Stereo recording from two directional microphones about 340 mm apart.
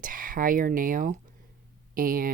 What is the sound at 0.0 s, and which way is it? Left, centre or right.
Speech, right.